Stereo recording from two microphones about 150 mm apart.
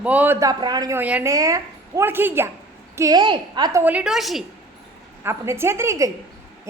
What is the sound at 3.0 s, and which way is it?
Speech, 25° right (ahead or behind).